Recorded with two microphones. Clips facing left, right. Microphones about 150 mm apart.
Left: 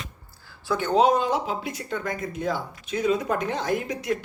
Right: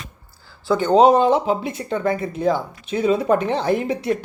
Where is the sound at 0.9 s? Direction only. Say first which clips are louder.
Right 7 dB; 30° right (ahead or behind).